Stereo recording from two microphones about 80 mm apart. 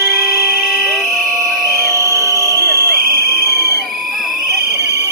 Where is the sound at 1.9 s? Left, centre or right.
Right.